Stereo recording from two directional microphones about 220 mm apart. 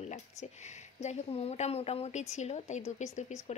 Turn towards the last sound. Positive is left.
turn(degrees=30)  # may be behind; listen again after turning